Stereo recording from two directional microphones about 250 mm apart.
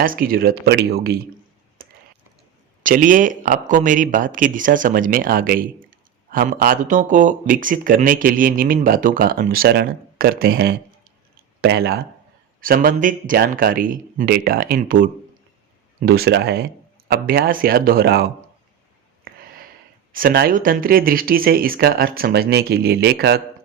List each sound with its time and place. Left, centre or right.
0.0 s speech: right
2.8 s speech: right
19.3 s a sound: right
20.1 s speech: right